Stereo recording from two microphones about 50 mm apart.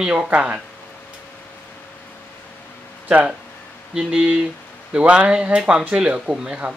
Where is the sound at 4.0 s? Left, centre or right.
Centre.